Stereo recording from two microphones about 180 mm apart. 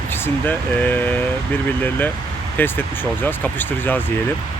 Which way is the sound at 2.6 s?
10° left (ahead or behind).